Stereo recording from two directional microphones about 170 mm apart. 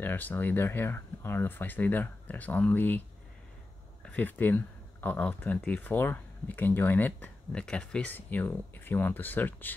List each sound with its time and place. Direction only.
0.0 s speech: 10° left (ahead or behind)
4.0 s speech: 10° left (ahead or behind)